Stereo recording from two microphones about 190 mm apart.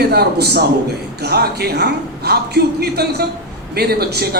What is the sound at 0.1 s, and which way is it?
A man's voice, 55° right (ahead or behind).